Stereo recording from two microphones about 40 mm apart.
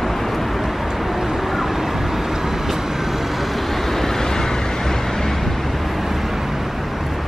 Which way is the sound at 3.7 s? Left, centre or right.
Centre.